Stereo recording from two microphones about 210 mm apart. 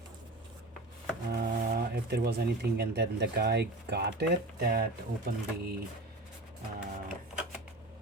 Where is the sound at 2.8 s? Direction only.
50° right (ahead or behind).